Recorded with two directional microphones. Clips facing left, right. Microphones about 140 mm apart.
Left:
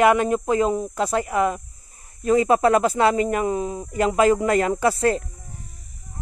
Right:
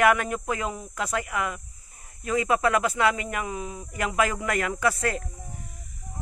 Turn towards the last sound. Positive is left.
turn(degrees=30)  # may be behind; listen again after turning